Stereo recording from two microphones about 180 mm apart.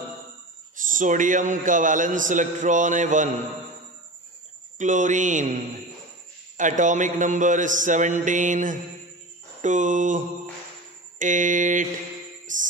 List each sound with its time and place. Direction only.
0.7 s a man's voice: 45° right (ahead or behind)
4.7 s a man's voice: 45° right (ahead or behind)
6.5 s a man's voice: 45° right (ahead or behind)
12.5 s music: 45° right (ahead or behind)